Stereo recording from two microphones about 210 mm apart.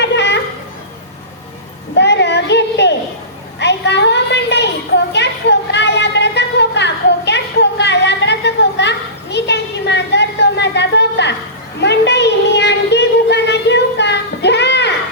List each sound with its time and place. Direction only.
0.0 s children playing: 55° left (ahead or behind)
2.0 s child singing: 55° left (ahead or behind)
3.6 s a sound: 55° left (ahead or behind)